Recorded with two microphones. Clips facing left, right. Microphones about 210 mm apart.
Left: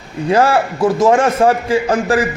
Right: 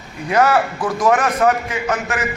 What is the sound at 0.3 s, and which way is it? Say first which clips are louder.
A man's voice: left 3 dB; 30° left (ahead or behind).